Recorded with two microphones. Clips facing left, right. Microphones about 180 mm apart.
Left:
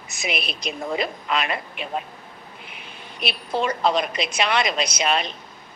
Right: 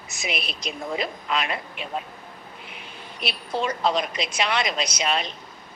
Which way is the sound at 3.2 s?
65° left (ahead or behind).